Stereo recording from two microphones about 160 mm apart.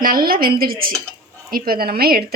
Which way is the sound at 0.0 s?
65° right (ahead or behind).